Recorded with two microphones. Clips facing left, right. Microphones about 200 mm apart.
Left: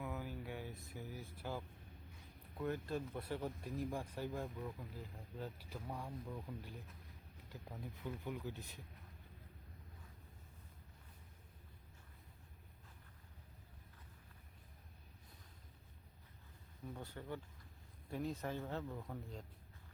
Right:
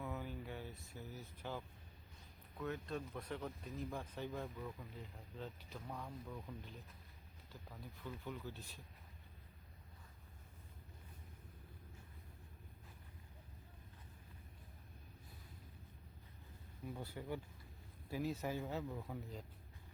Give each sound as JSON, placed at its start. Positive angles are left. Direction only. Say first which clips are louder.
{"t": 0.0, "sound": "a sound", "louder": "even", "side_deg": 5}
{"t": 2.6, "sound": "speech", "louder": "left 3 dB", "side_deg": 5}
{"t": 16.8, "sound": "speech", "louder": "right 2 dB", "side_deg": -10}